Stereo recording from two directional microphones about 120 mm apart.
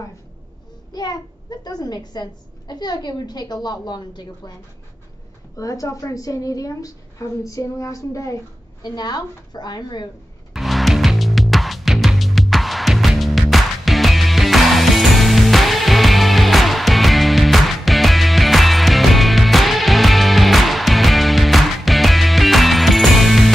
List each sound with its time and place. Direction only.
0.9 s a woman's voice: 35° left (ahead or behind)
5.6 s a woman's voice: 30° left (ahead or behind)
10.5 s music: centre (ahead or behind)